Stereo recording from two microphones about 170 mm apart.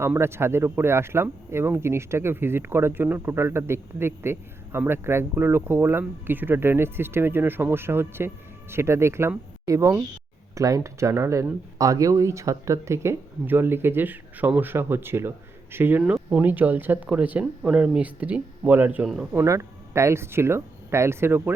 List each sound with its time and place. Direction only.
0.0 s speech: 15° right (ahead or behind)